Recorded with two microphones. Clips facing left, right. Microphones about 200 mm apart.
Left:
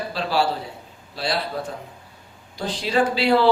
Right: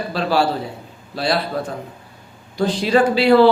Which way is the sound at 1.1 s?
50° right (ahead or behind).